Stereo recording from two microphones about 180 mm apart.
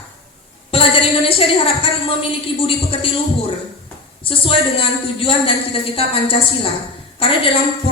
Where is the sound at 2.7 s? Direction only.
30° left (ahead or behind).